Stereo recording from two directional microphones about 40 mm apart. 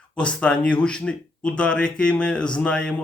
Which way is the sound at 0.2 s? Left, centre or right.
Left.